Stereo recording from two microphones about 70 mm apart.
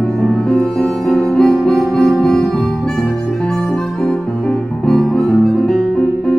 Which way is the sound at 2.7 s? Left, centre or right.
Centre.